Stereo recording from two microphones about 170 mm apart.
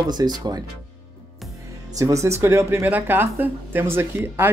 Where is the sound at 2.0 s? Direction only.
15° right (ahead or behind).